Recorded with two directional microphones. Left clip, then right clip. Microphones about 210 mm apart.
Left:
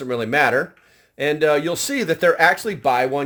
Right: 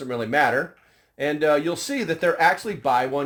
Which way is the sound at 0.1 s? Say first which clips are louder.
Left 3 dB; 50° left (ahead or behind).